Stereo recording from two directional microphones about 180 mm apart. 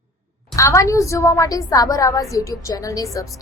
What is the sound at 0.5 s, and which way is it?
A woman's voice, 15° left (ahead or behind).